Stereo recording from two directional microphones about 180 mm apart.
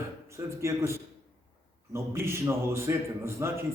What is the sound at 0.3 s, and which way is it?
A man's voice, 15° right (ahead or behind).